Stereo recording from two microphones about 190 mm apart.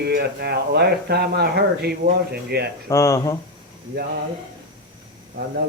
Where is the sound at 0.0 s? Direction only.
60° right (ahead or behind).